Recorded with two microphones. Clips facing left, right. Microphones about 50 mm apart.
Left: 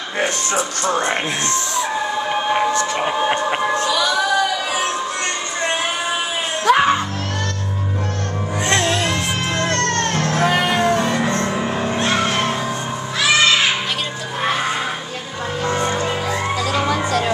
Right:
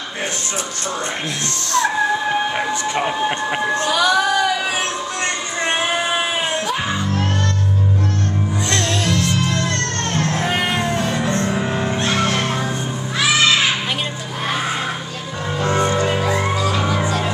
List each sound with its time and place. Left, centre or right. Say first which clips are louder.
3.1 s a sound: left 2 dB; centre
3.8 s a sound: right 2 dB; right
6.6 s music: left 8 dB; left
8.8 s music: even; centre
9.5 s music: left 1 dB; left
11.0 s music: left 2 dB; centre
11.6 s music: even; centre
11.9 s vehicle: left 2 dB; centre
15.6 s music: right 3 dB; centre